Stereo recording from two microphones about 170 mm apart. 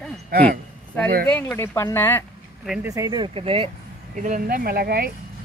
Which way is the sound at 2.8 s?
20° right (ahead or behind).